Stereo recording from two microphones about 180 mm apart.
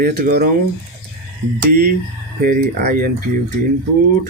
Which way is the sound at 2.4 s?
50° right (ahead or behind).